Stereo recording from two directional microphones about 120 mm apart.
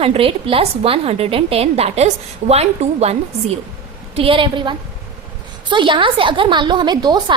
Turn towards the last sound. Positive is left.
turn(degrees=-35)  # may be behind; listen again after turning